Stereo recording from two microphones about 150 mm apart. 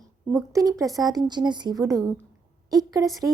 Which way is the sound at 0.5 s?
25° right (ahead or behind).